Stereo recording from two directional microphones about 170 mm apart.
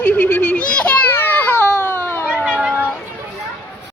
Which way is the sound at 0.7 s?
10° left (ahead or behind).